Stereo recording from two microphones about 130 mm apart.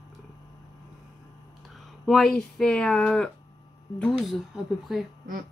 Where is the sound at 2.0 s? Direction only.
Centre (ahead or behind).